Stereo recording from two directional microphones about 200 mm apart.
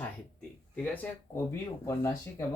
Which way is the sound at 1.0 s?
10° left (ahead or behind).